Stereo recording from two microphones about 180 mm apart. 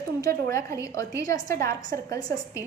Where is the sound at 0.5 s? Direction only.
15° left (ahead or behind).